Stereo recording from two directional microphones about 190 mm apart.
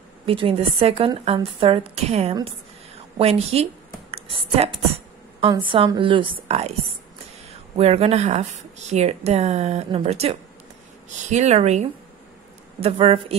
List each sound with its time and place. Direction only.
0.3 s a woman's voice: 30° right (ahead or behind)
4.1 s a sound: 30° right (ahead or behind)
5.7 s a woman's voice: 25° right (ahead or behind)
7.7 s speech: 30° right (ahead or behind)
12.8 s speech: 30° right (ahead or behind)